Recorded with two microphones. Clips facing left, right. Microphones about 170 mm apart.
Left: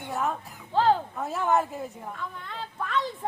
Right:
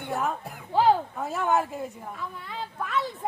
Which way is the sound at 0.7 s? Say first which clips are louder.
Right 1 dB; 10° right (ahead or behind).